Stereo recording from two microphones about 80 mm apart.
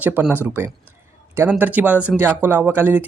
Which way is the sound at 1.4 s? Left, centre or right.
Right.